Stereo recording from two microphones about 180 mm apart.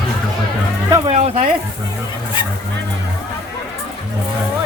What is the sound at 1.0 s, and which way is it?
Speech, 35° right (ahead or behind).